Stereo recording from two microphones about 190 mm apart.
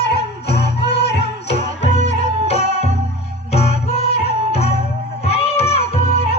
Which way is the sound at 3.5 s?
35° left (ahead or behind).